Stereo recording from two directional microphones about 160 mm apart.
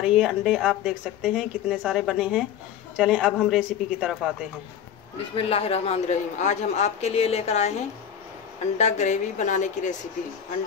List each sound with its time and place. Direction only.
0.0 s speech: 5° right (ahead or behind)
5.3 s a man's voice: 35° left (ahead or behind)
8.7 s a woman's voice: 45° left (ahead or behind)